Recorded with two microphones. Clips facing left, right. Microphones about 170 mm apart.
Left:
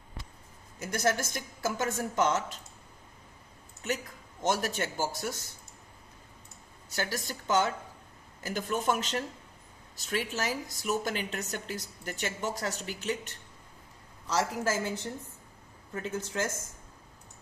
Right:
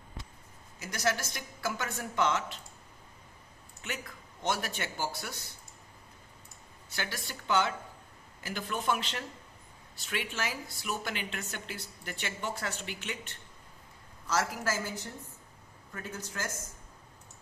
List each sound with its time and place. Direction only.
0.8 s a woman's voice: 50° left (ahead or behind)
4.4 s a woman's voice: 40° left (ahead or behind)
6.9 s a woman's voice: 40° left (ahead or behind)
14.3 s a woman's voice: 25° left (ahead or behind)